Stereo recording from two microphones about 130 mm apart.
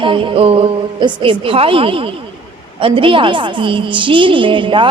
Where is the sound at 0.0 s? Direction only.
40° right (ahead or behind).